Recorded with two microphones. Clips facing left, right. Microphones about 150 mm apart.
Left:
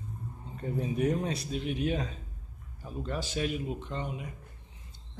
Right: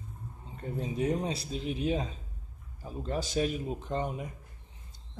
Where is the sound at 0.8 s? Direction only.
25° right (ahead or behind).